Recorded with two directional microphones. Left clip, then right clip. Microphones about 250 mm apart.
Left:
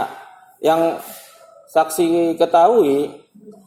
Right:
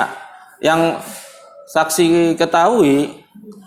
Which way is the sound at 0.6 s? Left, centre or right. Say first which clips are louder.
Right 1 dB; right.